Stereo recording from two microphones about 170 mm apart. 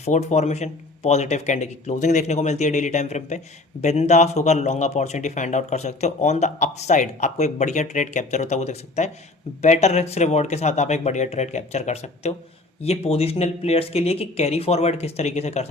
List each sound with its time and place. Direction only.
0.0 s speech: 40° left (ahead or behind)